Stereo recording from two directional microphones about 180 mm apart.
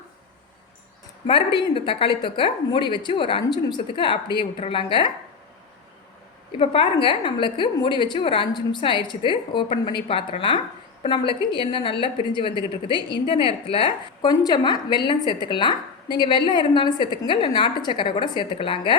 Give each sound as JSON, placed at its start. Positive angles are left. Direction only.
{"t": 1.3, "sound": "a woman's voice", "side_deg": 30}
{"t": 6.6, "sound": "a woman's voice", "side_deg": 30}